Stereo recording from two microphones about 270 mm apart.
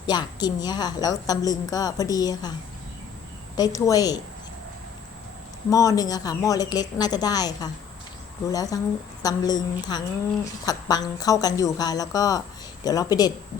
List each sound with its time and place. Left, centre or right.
0.1 s a woman's voice: centre
3.6 s a woman's voice: centre
5.7 s a woman's voice: centre